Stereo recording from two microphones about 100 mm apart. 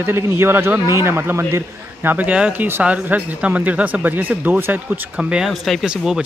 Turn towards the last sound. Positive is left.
turn(degrees=-5)  # may be behind; listen again after turning